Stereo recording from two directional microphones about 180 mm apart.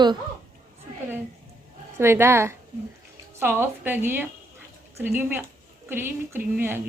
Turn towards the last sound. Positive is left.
turn(degrees=-10)  # may be behind; listen again after turning